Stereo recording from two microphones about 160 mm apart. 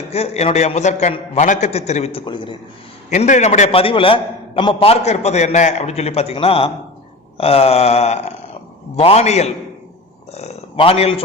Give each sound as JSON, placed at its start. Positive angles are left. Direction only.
{"t": 0.1, "sound": "a man's voice", "side_deg": 40}
{"t": 2.2, "sound": "a man's voice", "side_deg": 30}
{"t": 3.1, "sound": "a man's voice", "side_deg": 50}
{"t": 3.7, "sound": "a man's voice", "side_deg": 35}